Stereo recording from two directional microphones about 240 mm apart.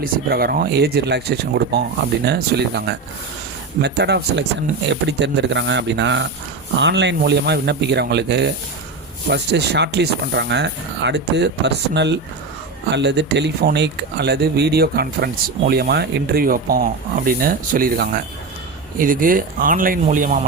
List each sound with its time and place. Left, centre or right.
0.0 s speech: right